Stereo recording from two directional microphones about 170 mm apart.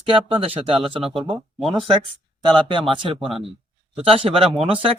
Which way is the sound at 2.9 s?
30° right (ahead or behind).